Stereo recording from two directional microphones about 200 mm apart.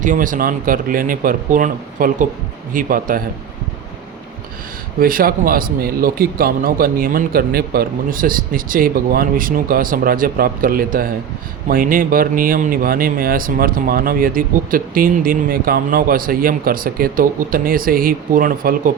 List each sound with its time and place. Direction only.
0.0 s speech: 40° right (ahead or behind)
4.9 s speech: 45° right (ahead or behind)